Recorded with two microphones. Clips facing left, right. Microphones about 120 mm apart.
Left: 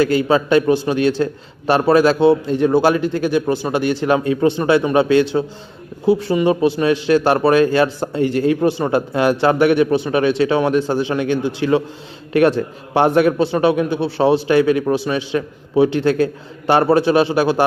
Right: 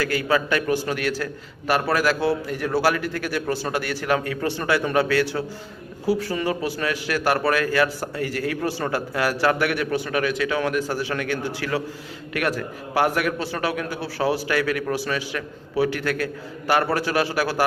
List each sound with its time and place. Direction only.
0.0 s a man's voice: 25° left (ahead or behind)